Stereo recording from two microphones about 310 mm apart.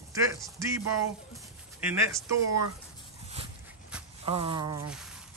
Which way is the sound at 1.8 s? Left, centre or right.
Centre.